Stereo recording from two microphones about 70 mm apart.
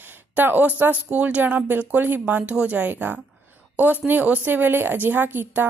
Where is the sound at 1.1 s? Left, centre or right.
Right.